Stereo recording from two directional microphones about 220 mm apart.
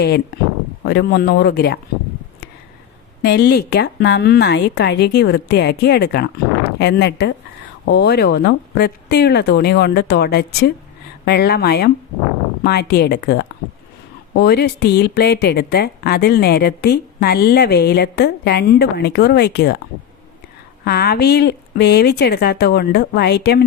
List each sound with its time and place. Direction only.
0.9 s speech: 50° left (ahead or behind)
3.2 s speech: 50° left (ahead or behind)
20.8 s speech: 45° left (ahead or behind)